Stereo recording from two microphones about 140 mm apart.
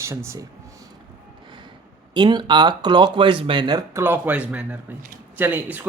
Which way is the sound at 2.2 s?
35° right (ahead or behind).